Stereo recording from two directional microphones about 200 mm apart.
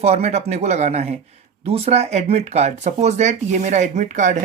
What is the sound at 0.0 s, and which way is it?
Speech, 35° right (ahead or behind).